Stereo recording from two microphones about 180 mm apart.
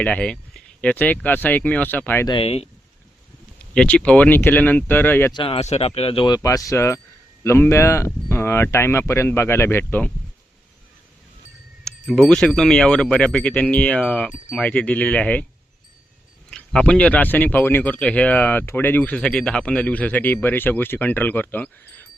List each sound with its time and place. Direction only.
0.0 s speech: 5° left (ahead or behind)
2.2 s speech: 30° left (ahead or behind)
3.8 s speech: 5° left (ahead or behind)
5.3 s speech: 30° left (ahead or behind); by 10.1 s 10° left (ahead or behind)
11.9 s wind chime: centre (ahead or behind)
12.3 s speech: 5° left (ahead or behind)
16.5 s speech: 5° left (ahead or behind)